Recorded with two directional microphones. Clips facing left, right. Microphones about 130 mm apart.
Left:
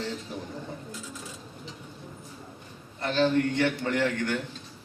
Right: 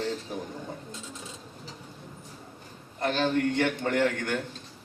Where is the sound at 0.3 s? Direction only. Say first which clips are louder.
Right 2 dB; 50° right (ahead or behind).